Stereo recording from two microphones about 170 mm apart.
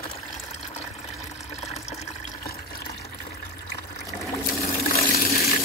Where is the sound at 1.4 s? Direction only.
40° left (ahead or behind).